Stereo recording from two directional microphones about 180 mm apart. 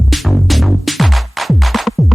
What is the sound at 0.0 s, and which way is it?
Music, centre (ahead or behind).